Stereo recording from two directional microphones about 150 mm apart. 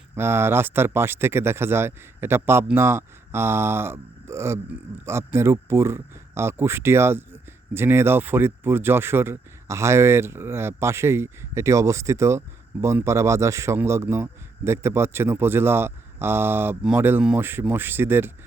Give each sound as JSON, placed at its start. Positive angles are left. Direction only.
{"t": 0.2, "sound": "speech", "side_deg": -15}